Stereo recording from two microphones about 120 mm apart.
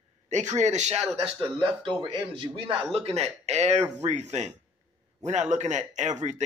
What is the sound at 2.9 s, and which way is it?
A man's voice, 60° right (ahead or behind).